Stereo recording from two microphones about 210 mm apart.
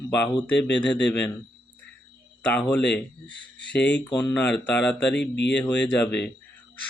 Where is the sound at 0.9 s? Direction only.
55° left (ahead or behind).